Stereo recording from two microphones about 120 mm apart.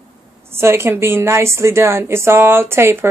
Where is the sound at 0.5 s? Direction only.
20° right (ahead or behind).